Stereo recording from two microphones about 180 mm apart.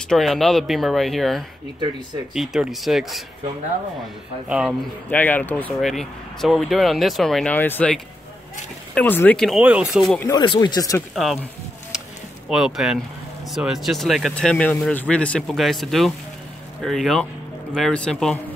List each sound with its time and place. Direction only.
0.1 s speech: centre (ahead or behind)
4.5 s speech: 5° right (ahead or behind)
5.1 s speech: 10° left (ahead or behind)
9.6 s speech: 5° right (ahead or behind)
10.3 s speech: 25° left (ahead or behind)
11.1 s speech: centre (ahead or behind)
11.9 s a sound: 5° right (ahead or behind)
12.4 s speech: centre (ahead or behind)